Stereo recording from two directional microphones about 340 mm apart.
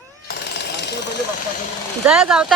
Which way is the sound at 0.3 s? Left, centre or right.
Left.